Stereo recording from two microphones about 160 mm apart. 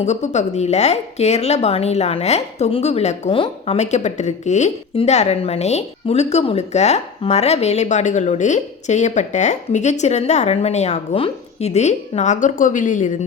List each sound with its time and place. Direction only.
0.0 s a woman's voice: 45° left (ahead or behind)